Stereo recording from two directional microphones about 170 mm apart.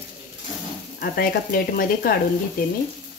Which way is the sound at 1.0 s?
60° left (ahead or behind).